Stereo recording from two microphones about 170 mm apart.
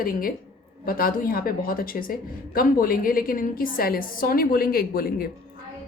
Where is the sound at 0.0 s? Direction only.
60° left (ahead or behind).